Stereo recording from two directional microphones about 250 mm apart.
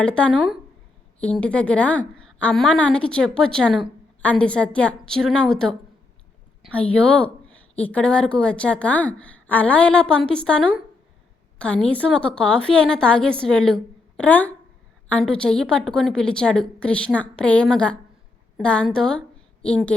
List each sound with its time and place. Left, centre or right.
0.0 s a woman's voice: centre